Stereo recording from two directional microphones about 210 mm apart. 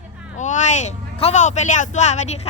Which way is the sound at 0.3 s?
35° left (ahead or behind).